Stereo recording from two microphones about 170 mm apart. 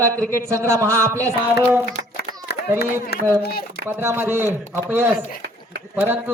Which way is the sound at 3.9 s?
15° right (ahead or behind).